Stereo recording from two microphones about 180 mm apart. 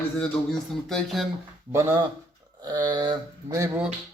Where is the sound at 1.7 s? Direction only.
15° right (ahead or behind).